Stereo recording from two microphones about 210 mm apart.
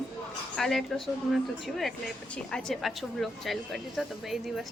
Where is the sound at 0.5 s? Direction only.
Centre (ahead or behind).